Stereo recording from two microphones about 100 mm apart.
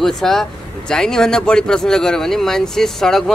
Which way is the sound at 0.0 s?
5° left (ahead or behind).